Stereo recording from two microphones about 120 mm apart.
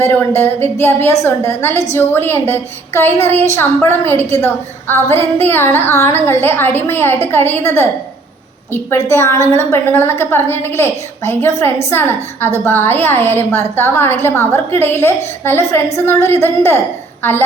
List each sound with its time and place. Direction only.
0.0 s a woman's voice: 20° left (ahead or behind)